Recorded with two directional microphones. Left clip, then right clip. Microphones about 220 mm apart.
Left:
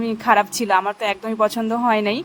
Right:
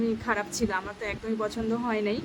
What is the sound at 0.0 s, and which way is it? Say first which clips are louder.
A woman's voice: left 12 dB; 40° left (ahead or behind).